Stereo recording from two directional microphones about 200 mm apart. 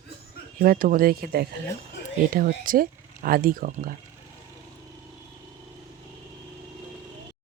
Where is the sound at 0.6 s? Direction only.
45° right (ahead or behind).